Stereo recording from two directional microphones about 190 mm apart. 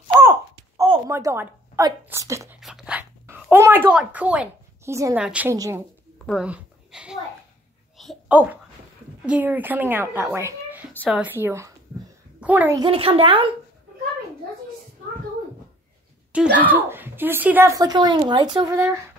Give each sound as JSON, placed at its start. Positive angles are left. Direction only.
{"t": 0.2, "sound": "a sound", "side_deg": -15}
{"t": 2.6, "sound": "speech", "side_deg": -5}
{"t": 6.2, "sound": "a sound", "side_deg": -5}
{"t": 9.2, "sound": "a woman's voice", "side_deg": -10}
{"t": 12.7, "sound": "a woman's voice", "side_deg": -25}
{"t": 16.5, "sound": "a woman's voice", "side_deg": -10}